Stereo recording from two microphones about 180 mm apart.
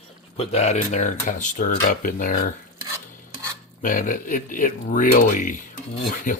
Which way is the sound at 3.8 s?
50° left (ahead or behind).